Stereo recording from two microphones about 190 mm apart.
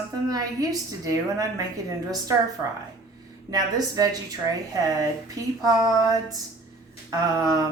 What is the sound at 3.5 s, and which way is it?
A man's voice, 20° right (ahead or behind).